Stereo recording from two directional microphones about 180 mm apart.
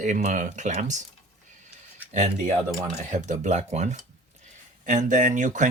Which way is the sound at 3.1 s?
40° right (ahead or behind).